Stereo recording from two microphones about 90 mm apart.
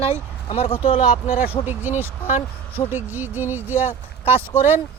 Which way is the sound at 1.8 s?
25° right (ahead or behind).